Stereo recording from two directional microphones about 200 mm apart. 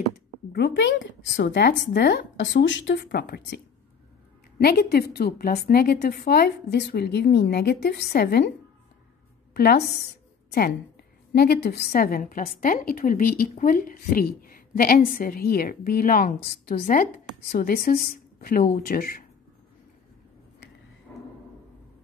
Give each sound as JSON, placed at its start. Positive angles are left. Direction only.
{"t": 0.5, "sound": "a woman's voice", "side_deg": 55}
{"t": 9.5, "sound": "a woman's voice", "side_deg": 50}
{"t": 11.3, "sound": "a woman's voice", "side_deg": 55}
{"t": 21.1, "sound": "a sound", "side_deg": 5}